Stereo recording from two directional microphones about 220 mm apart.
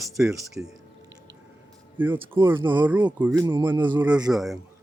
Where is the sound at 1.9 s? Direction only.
10° right (ahead or behind).